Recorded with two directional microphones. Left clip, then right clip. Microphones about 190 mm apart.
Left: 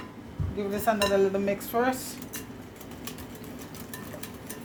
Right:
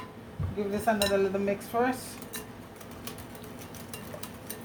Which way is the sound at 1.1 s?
40° left (ahead or behind).